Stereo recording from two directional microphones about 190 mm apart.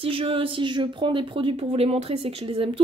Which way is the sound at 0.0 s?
30° right (ahead or behind).